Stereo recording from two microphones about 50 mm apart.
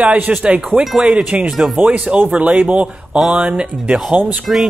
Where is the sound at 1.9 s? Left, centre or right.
Right.